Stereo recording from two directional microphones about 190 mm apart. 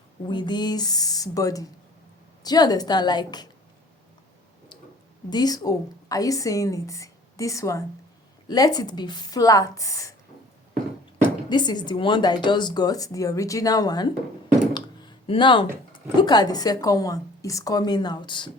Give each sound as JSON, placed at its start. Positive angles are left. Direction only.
{"t": 0.3, "sound": "speech", "side_deg": 25}
{"t": 5.3, "sound": "a woman's voice", "side_deg": 20}
{"t": 11.4, "sound": "speech", "side_deg": 25}